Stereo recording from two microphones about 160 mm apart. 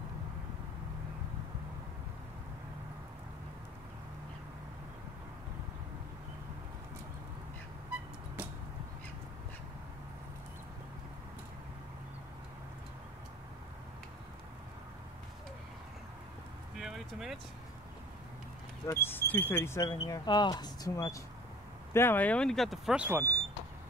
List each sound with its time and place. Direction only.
16.7 s a sound: centre (ahead or behind)
18.9 s speech: 15° left (ahead or behind)
19.9 s speech: 25° left (ahead or behind); by 23.3 s 10° right (ahead or behind)